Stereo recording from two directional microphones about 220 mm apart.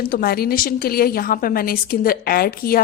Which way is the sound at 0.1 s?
45° left (ahead or behind).